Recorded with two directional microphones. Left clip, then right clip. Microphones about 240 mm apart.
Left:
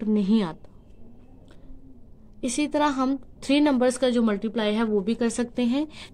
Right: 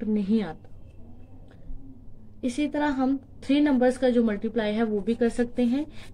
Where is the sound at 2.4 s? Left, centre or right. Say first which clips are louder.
Left 3 dB; left.